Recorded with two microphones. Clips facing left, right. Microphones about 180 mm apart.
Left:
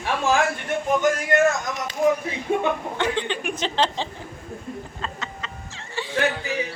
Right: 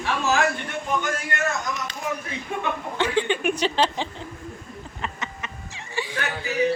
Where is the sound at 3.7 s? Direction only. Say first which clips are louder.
Even; 10° right (ahead or behind).